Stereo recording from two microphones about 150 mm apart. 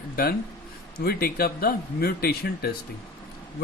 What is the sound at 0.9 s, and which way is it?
Speech, 90° left.